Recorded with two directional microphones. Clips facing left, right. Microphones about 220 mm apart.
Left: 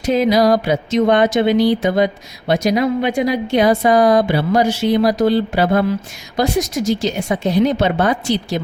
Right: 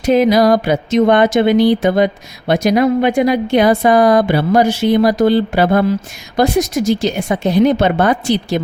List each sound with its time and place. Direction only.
0.1 s a woman's voice: 55° right (ahead or behind)